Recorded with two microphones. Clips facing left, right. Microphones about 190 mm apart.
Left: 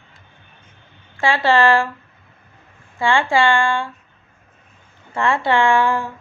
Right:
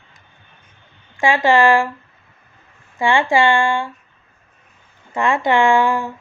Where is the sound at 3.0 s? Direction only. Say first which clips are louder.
Right 1 dB; 15° right (ahead or behind).